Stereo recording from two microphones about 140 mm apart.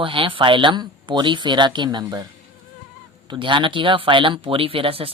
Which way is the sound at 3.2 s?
35° right (ahead or behind).